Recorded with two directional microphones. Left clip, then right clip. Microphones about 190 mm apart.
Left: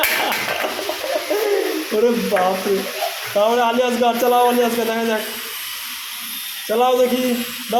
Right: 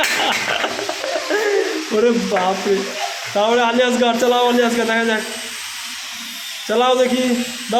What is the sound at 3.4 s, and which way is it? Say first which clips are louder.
A man's voice: right 1 dB; 20° right (ahead or behind).